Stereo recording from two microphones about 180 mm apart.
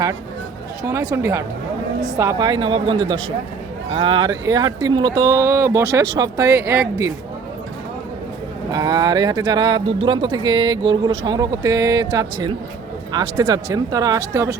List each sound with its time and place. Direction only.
0.9 s speech: 15° right (ahead or behind)
8.7 s speech: 20° right (ahead or behind)